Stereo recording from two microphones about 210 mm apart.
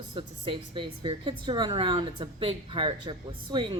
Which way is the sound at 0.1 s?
25° right (ahead or behind).